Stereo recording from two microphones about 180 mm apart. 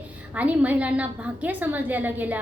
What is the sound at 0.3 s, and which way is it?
A woman's voice, 10° right (ahead or behind).